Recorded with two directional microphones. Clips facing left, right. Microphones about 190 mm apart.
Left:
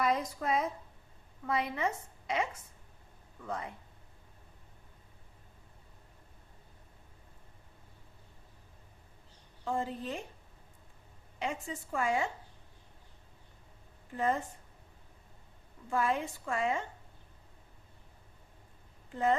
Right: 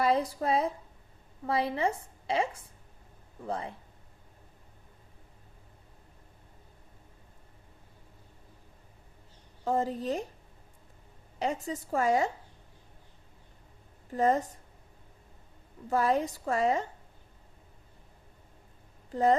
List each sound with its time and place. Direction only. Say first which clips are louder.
0.0 s a woman's voice: right 4 dB; 30° right (ahead or behind)
9.6 s a woman's voice: right 6 dB; 40° right (ahead or behind)
11.3 s a woman's voice: right 5 dB; 40° right (ahead or behind)
14.1 s a woman's voice: right 6 dB; 40° right (ahead or behind)
15.9 s a woman's voice: right 5 dB; 40° right (ahead or behind)
19.1 s a woman's voice: right 5 dB; 40° right (ahead or behind)